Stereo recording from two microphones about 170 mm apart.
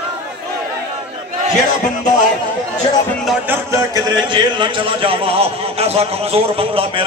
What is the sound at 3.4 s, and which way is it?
A man's voice, 15° right (ahead or behind).